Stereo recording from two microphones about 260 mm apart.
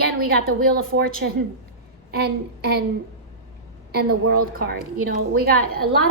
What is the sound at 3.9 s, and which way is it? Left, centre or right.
A woman's voice, right.